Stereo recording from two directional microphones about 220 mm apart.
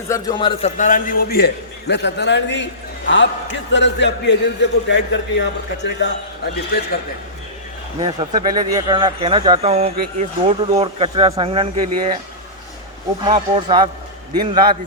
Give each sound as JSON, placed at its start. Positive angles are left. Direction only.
{"t": 0.1, "sound": "a man's voice", "side_deg": 20}
{"t": 0.8, "sound": "a man's voice", "side_deg": 35}
{"t": 7.9, "sound": "speech", "side_deg": -20}
{"t": 13.2, "sound": "speech", "side_deg": -25}